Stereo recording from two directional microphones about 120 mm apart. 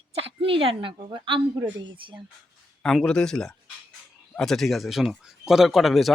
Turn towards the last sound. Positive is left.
turn(degrees=0)  # may be behind; listen again after turning